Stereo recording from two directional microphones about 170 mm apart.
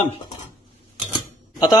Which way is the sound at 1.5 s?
25° left (ahead or behind).